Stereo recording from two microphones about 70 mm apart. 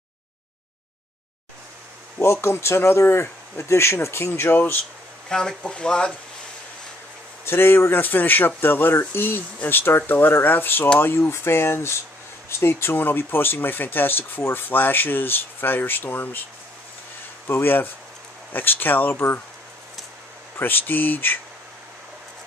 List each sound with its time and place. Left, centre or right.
2.1 s speech: left
4.3 s speech: left
5.3 s speech: centre
7.4 s speech: left
17.5 s speech: left
20.5 s speech: left